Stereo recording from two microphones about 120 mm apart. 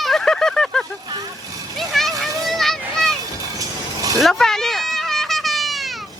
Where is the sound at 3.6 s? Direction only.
30° right (ahead or behind).